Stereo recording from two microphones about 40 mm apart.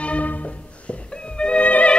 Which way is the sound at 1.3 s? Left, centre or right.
Left.